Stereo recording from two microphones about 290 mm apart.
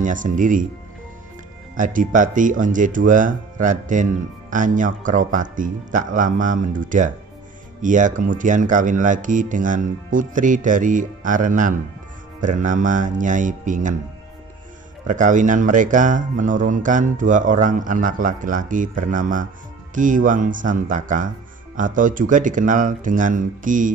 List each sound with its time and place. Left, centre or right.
0.0 s speech: right
1.8 s speech: right
15.0 s speech: right